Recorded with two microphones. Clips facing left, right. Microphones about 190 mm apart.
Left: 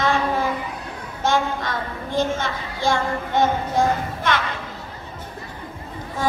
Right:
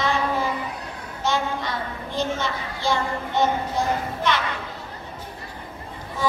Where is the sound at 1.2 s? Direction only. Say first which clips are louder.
Left 3 dB; 50° left (ahead or behind).